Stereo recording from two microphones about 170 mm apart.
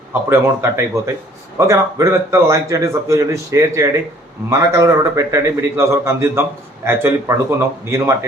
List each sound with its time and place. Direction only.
0.1 s a man's voice: 15° right (ahead or behind)